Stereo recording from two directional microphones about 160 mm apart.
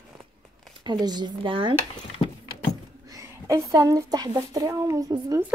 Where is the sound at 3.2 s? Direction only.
20° right (ahead or behind).